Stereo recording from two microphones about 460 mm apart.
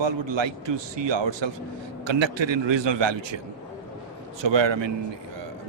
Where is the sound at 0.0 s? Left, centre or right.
Right.